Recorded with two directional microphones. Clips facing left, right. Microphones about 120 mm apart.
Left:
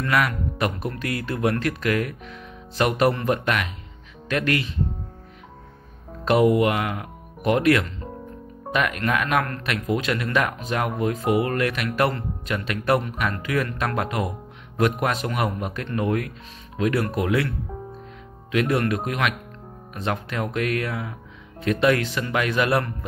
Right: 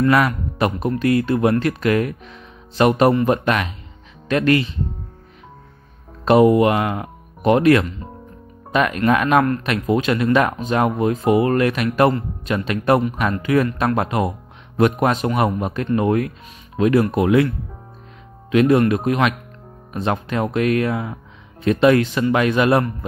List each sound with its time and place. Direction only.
0.0 s speech: 30° right (ahead or behind)
6.2 s a man's voice: 30° right (ahead or behind)